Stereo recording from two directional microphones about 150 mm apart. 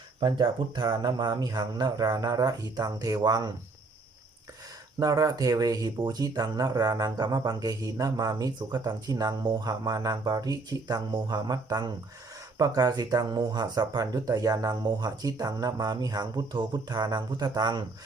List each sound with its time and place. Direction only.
0.2 s speech: 25° right (ahead or behind)
4.9 s speech: 25° right (ahead or behind)